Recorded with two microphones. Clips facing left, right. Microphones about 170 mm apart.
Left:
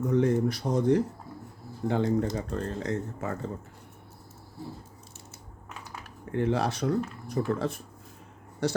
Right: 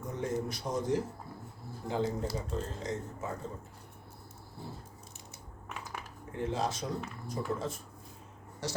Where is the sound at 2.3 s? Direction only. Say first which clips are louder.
Left 5 dB; 65° left (ahead or behind).